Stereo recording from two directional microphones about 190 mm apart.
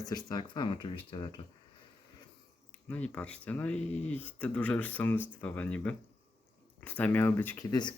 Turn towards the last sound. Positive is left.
turn(degrees=25)  # may be behind; listen again after turning